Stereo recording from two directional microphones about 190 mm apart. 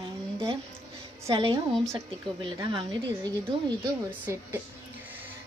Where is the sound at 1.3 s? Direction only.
20° right (ahead or behind).